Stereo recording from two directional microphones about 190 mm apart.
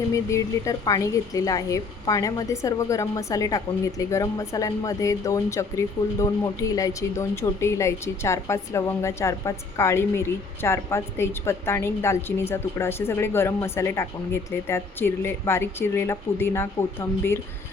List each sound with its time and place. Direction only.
0.1 s speech: 15° left (ahead or behind)